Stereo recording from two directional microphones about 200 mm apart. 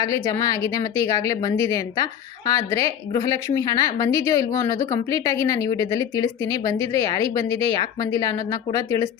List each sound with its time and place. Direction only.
0.0 s a woman's voice: 15° left (ahead or behind)